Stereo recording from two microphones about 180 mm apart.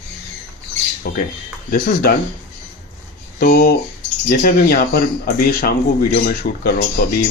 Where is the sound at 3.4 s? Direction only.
55° left (ahead or behind).